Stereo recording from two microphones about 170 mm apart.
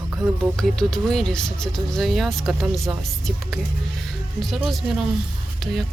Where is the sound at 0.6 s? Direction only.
Centre (ahead or behind).